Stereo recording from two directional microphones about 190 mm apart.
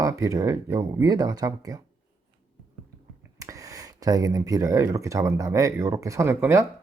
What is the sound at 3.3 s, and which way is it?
Speech, 15° right (ahead or behind).